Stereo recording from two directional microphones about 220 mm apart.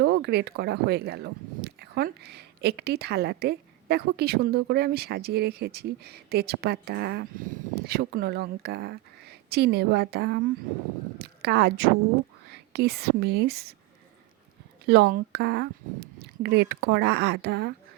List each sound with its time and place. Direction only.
0.0 s speech: 50° right (ahead or behind)
14.8 s speech: 45° right (ahead or behind)